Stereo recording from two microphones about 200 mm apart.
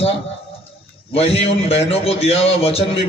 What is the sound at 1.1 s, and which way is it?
A man's voice, 30° left (ahead or behind).